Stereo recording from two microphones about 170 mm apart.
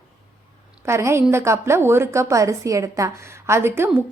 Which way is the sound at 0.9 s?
15° right (ahead or behind).